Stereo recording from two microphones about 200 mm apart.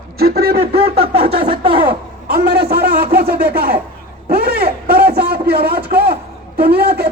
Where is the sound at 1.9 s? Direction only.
50° right (ahead or behind).